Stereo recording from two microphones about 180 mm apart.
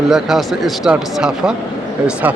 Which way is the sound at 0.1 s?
Centre (ahead or behind).